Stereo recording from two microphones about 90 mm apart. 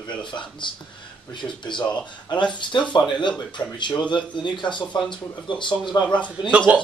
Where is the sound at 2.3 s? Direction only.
60° left (ahead or behind).